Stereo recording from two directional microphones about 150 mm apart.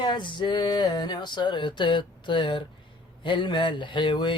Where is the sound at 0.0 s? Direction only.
30° left (ahead or behind).